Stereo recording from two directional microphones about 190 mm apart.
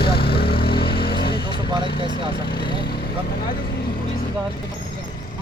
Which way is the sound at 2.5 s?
25° left (ahead or behind).